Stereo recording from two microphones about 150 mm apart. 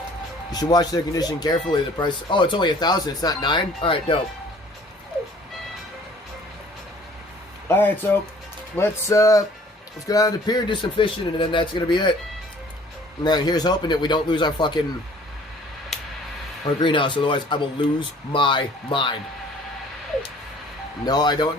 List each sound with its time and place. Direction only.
0.5 s a man's voice: 25° left (ahead or behind)
7.7 s a man's voice: 15° left (ahead or behind); by 12.1 s 30° left (ahead or behind)
13.2 s a man's voice: 30° left (ahead or behind)
16.8 s speech: 35° left (ahead or behind)
21.0 s a man's voice: 25° left (ahead or behind)